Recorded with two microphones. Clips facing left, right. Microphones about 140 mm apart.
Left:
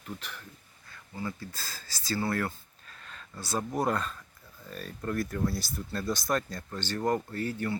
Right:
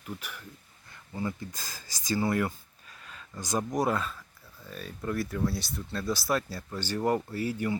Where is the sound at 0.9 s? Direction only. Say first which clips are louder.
Right 3 dB; 20° right (ahead or behind).